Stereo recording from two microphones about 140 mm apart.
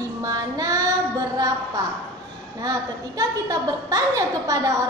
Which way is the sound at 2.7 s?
25° right (ahead or behind).